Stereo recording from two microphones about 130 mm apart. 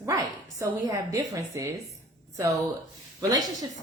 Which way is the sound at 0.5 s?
25° right (ahead or behind).